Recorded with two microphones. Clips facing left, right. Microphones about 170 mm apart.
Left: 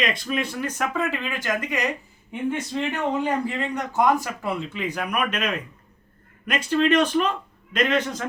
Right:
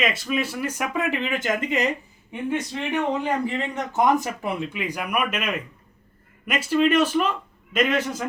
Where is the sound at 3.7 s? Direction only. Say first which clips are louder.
Even; 20° right (ahead or behind).